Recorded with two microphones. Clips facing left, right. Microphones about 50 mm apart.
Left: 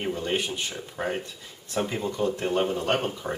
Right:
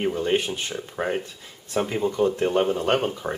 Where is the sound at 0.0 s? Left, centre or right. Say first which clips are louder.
Right 5 dB; centre.